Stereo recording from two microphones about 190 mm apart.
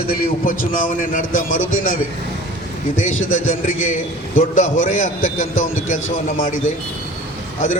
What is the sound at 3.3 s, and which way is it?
A man's voice, 40° left (ahead or behind).